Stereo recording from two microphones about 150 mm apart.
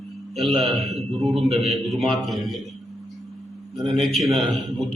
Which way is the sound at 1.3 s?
45° right (ahead or behind).